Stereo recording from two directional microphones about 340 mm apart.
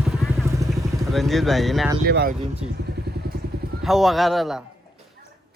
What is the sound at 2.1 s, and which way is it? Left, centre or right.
Speech, right.